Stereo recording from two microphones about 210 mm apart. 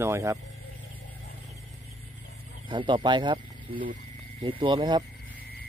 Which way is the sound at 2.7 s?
25° right (ahead or behind).